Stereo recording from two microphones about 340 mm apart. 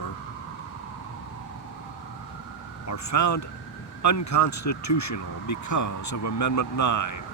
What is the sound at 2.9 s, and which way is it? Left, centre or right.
Speech, left.